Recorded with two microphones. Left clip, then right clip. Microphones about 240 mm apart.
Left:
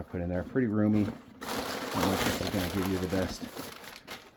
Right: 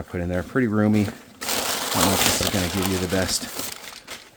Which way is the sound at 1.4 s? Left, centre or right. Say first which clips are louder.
Right 10 dB; centre.